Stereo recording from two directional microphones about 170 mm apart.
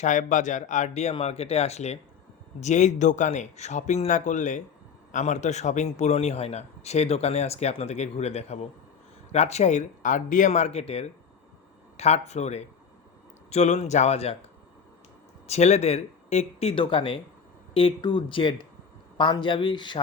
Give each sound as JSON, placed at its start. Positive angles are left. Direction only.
{"t": 0.0, "sound": "a man's voice", "side_deg": 45}
{"t": 15.4, "sound": "a man's voice", "side_deg": 40}